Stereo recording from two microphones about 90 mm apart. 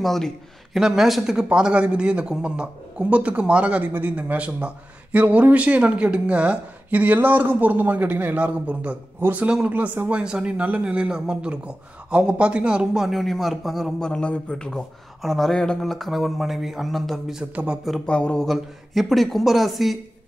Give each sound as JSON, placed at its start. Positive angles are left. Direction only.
{"t": 0.0, "sound": "a man's voice", "side_deg": 5}
{"t": 13.9, "sound": "speech", "side_deg": 10}
{"t": 18.0, "sound": "speech", "side_deg": 10}